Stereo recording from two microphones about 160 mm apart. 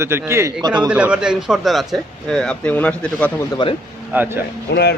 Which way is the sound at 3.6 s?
30° left (ahead or behind).